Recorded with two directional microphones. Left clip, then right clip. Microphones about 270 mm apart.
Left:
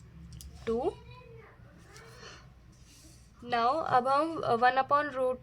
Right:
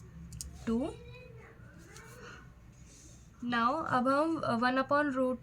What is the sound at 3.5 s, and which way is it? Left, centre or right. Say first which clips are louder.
Speech: left 3 dB; left.